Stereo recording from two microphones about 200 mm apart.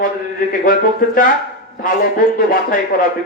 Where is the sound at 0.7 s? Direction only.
45° left (ahead or behind).